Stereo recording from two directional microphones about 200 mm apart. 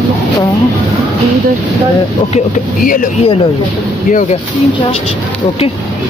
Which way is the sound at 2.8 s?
45° left (ahead or behind).